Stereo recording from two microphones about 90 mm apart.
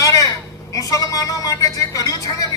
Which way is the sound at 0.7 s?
40° left (ahead or behind).